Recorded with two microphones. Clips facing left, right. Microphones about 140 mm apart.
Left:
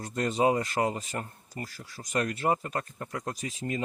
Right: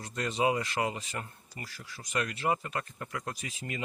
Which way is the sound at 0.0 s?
45° left (ahead or behind).